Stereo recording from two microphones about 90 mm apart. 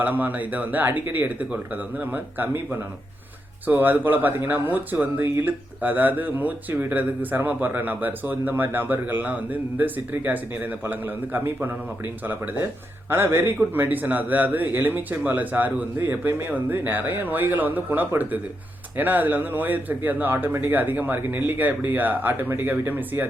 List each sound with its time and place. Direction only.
0.0 s speech: 20° right (ahead or behind)